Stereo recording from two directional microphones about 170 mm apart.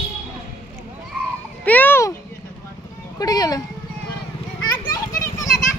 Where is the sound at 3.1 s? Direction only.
20° left (ahead or behind).